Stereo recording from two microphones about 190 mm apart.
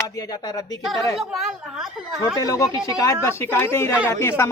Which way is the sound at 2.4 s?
15° left (ahead or behind).